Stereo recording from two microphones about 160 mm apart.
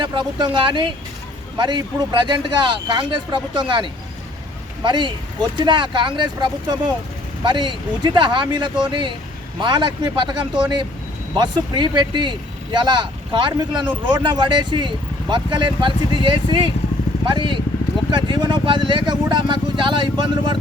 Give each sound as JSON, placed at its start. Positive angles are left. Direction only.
{"t": 0.0, "sound": "speech", "side_deg": -30}